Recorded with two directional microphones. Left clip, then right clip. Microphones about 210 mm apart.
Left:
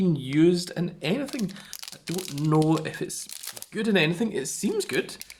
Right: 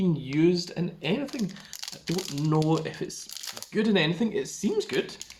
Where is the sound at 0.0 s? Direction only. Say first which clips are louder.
Left 3 dB; 50° left (ahead or behind).